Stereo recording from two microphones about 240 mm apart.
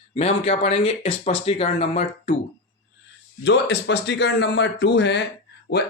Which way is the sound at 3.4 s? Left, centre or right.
Left.